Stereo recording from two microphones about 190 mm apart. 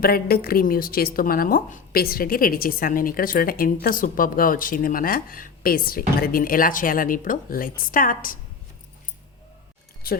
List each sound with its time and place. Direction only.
0.0 s speech: 55° left (ahead or behind)
10.0 s speech: 50° left (ahead or behind)